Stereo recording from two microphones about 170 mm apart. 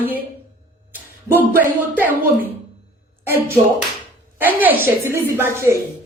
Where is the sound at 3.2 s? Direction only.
15° right (ahead or behind).